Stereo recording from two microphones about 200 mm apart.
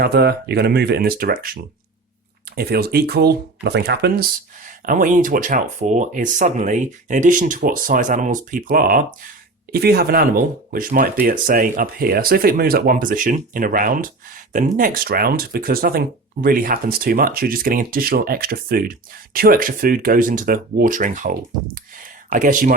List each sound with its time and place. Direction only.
0.0 s speech: 55° right (ahead or behind)
2.6 s speech: 50° right (ahead or behind)
21.9 s a sound: 40° right (ahead or behind)